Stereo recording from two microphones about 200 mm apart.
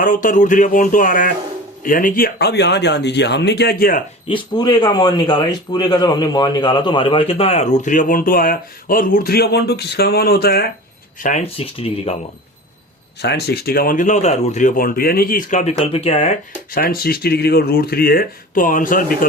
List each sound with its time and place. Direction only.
0.0 s speech: 40° left (ahead or behind)
4.3 s speech: 25° left (ahead or behind); by 10.7 s 55° left (ahead or behind)
11.2 s speech: 35° left (ahead or behind)
13.2 s speech: 55° left (ahead or behind)